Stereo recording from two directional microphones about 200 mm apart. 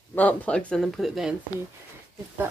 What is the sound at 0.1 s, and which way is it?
Speech, 10° left (ahead or behind).